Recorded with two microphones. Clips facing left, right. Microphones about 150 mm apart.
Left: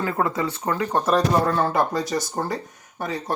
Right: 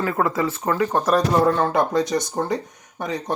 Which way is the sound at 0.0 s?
25° left (ahead or behind).